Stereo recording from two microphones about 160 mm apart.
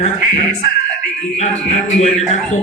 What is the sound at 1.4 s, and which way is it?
Music, 45° left (ahead or behind).